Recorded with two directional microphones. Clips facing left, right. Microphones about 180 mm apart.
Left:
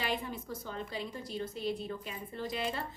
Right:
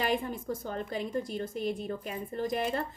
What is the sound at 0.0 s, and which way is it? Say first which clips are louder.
A woman's voice: right 6 dB; 45° right (ahead or behind).